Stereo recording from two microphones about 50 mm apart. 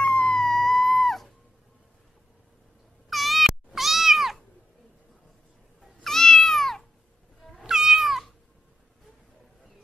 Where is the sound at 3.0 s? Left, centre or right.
Centre.